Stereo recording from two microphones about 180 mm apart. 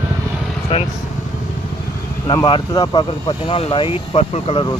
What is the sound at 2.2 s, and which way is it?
Speech, 25° left (ahead or behind).